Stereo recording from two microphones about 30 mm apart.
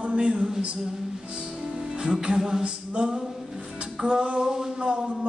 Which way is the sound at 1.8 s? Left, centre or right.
Centre.